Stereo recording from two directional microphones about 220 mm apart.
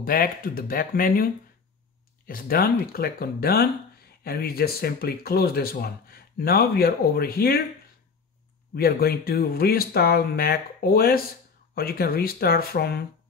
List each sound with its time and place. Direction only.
0.0 s speech: 40° left (ahead or behind)
8.7 s speech: 45° left (ahead or behind)